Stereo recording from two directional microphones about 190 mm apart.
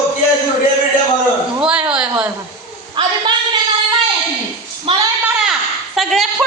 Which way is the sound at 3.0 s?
25° right (ahead or behind).